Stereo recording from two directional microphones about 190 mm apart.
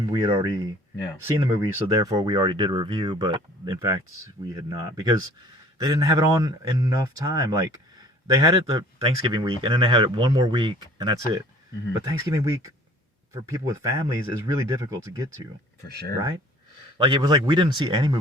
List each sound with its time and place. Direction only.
0.1 s speech: 25° right (ahead or behind)
17.0 s speech: 25° right (ahead or behind)